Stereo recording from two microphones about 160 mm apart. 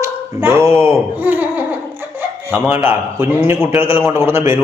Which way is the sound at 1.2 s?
10° right (ahead or behind).